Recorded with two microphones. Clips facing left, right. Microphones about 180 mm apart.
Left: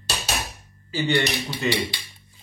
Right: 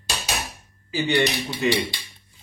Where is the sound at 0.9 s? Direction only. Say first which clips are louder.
Right 1 dB; 15° right (ahead or behind).